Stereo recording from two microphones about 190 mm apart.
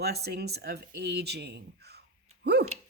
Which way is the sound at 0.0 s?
55° right (ahead or behind).